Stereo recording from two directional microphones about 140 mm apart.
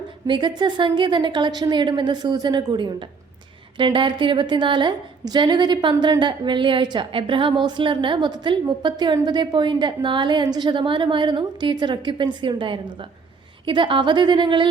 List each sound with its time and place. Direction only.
0.3 s a woman's voice: 35° right (ahead or behind)